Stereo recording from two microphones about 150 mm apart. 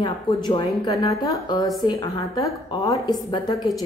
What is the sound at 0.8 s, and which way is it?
A woman's voice, 25° left (ahead or behind).